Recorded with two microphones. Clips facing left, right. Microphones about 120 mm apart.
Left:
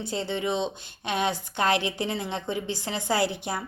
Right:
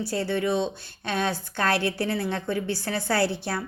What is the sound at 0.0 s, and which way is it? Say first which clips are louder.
A woman's voice: right 3 dB; 20° left (ahead or behind).